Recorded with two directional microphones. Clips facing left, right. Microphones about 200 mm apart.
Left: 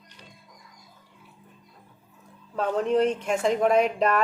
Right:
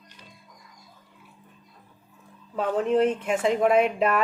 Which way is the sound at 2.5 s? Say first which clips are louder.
Right 1 dB; 5° right (ahead or behind).